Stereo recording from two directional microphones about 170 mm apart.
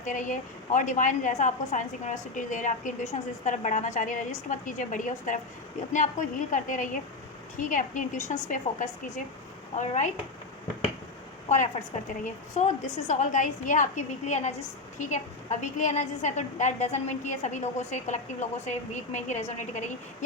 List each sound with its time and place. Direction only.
0.0 s a woman's voice: 50° left (ahead or behind)
11.4 s a woman's voice: 45° left (ahead or behind)